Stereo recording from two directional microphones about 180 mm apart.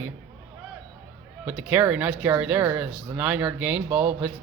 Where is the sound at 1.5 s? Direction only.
10° right (ahead or behind).